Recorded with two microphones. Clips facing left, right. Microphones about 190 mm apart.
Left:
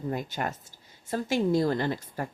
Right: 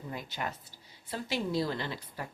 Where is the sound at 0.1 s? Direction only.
45° left (ahead or behind).